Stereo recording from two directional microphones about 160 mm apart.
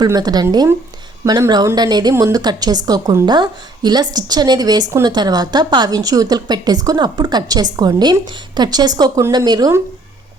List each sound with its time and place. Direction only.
0.0 s a woman's voice: 25° right (ahead or behind)